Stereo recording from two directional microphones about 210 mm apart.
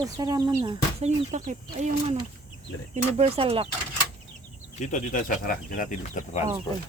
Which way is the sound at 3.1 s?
30° right (ahead or behind).